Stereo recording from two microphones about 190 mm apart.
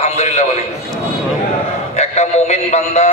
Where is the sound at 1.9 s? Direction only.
35° left (ahead or behind).